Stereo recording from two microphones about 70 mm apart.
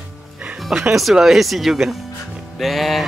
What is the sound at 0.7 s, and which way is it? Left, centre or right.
Music, centre.